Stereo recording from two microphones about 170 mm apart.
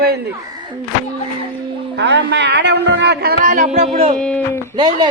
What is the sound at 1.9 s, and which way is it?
A man's voice, 90° right.